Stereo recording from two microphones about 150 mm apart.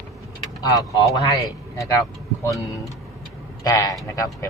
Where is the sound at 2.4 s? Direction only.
20° left (ahead or behind).